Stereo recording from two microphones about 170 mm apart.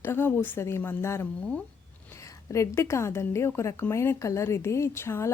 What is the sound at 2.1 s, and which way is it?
A woman's voice, 20° left (ahead or behind).